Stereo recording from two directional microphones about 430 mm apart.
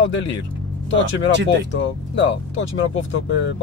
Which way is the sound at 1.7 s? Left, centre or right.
Left.